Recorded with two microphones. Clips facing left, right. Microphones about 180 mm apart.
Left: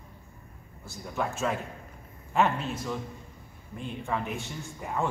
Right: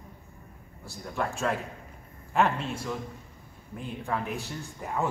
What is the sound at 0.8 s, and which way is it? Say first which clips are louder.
A man's voice: even; centre (ahead or behind).